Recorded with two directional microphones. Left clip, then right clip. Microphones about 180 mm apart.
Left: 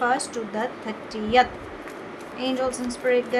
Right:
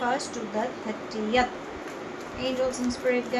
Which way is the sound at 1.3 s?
45° left (ahead or behind).